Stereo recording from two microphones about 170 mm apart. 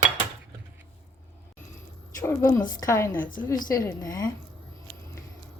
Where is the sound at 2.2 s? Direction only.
20° left (ahead or behind).